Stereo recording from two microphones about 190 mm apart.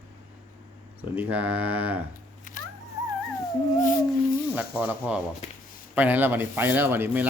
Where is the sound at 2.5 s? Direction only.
40° left (ahead or behind).